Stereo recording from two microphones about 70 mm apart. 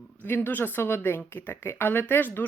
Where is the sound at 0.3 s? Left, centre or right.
Left.